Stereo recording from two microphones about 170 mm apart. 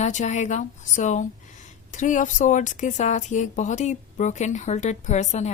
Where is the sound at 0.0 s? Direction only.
45° left (ahead or behind).